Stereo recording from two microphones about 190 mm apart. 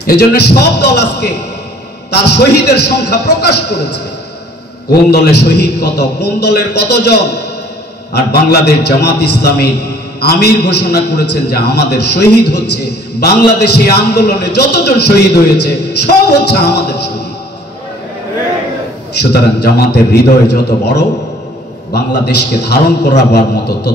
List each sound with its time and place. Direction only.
0.0 s a man's voice: 55° left (ahead or behind)
5.1 s a man's voice: 60° left (ahead or behind)
19.3 s a man's voice: 55° left (ahead or behind)